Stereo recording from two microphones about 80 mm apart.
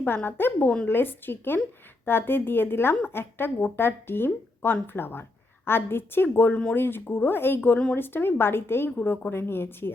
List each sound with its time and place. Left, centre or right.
0.3 s a woman's voice: left